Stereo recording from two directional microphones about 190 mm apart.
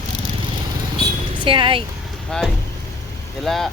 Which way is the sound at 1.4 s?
25° right (ahead or behind).